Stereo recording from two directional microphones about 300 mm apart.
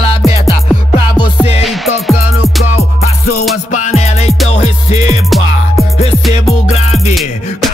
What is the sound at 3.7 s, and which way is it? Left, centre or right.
Music, left.